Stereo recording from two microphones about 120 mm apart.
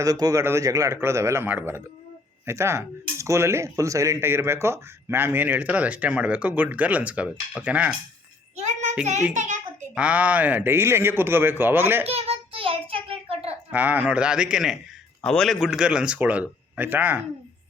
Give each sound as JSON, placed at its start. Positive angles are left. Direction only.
{"t": 0.0, "sound": "a man's voice", "side_deg": -30}
{"t": 8.5, "sound": "child singing", "side_deg": -80}
{"t": 9.3, "sound": "a child's voice", "side_deg": -85}
{"t": 9.9, "sound": "speech", "side_deg": -10}
{"t": 12.0, "sound": "child singing", "side_deg": -55}
{"t": 13.7, "sound": "speech", "side_deg": -15}
{"t": 15.2, "sound": "speech", "side_deg": 5}